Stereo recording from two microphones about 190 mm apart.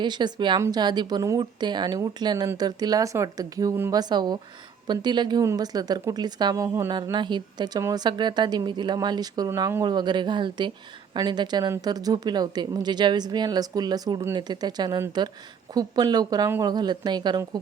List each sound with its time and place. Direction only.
0.0 s a woman's voice: 25° right (ahead or behind)